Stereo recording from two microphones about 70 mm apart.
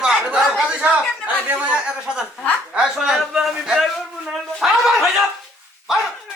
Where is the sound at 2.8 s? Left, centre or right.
Centre.